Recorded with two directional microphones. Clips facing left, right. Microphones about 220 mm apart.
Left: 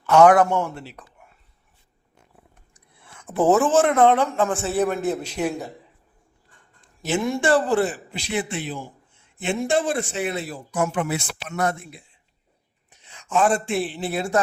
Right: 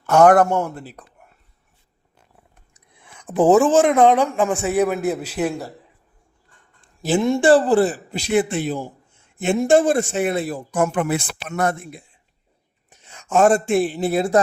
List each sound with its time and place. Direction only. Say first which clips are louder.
0.0 s speech: right 1 dB; 45° right (ahead or behind)
2.7 s speech: right 2 dB; 15° right (ahead or behind)
6.8 s speech: right 5 dB; 30° right (ahead or behind)